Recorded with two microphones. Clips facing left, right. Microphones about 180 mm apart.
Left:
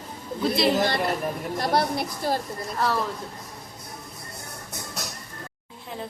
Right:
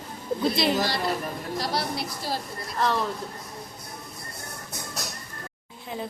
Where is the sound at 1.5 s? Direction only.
55° left (ahead or behind).